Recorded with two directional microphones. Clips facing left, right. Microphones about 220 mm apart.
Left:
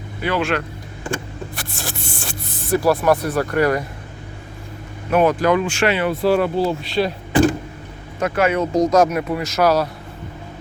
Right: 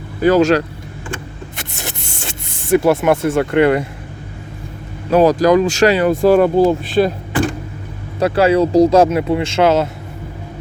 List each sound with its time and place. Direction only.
0.2 s speech: 40° right (ahead or behind)
1.5 s music: 20° right (ahead or behind)
2.7 s speech: 25° right (ahead or behind)
5.1 s speech: 35° right (ahead or behind)
8.2 s speech: 35° right (ahead or behind)